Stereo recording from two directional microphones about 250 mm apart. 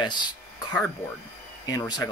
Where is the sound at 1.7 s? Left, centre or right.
Centre.